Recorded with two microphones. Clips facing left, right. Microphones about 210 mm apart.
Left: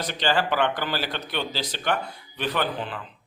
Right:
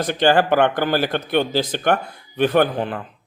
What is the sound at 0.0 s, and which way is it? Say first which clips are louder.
A man's voice: right 8 dB; 50° right (ahead or behind).